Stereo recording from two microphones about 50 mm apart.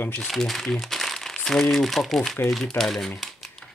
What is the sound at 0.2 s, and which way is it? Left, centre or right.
Speech, centre.